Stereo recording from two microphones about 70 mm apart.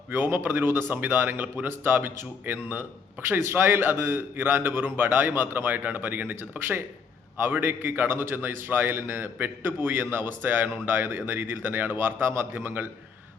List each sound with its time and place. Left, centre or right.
0.1 s speech: right